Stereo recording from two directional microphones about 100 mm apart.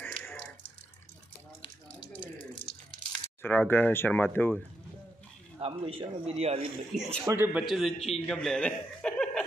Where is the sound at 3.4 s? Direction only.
15° left (ahead or behind).